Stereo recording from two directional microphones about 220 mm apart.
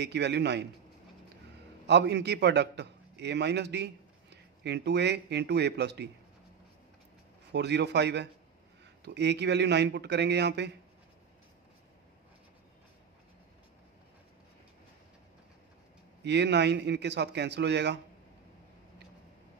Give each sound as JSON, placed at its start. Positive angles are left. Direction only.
{"t": 0.0, "sound": "a man's voice", "side_deg": -50}
{"t": 1.9, "sound": "a man's voice", "side_deg": -50}
{"t": 7.5, "sound": "a man's voice", "side_deg": -50}
{"t": 16.3, "sound": "a man's voice", "side_deg": -50}